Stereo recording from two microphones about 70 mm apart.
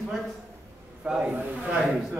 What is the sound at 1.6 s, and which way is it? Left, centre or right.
Speech, centre.